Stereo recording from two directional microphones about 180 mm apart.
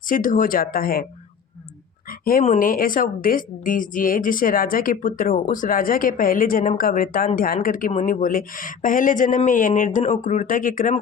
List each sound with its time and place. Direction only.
0.1 s speech: 50° left (ahead or behind)
2.0 s speech: 50° left (ahead or behind)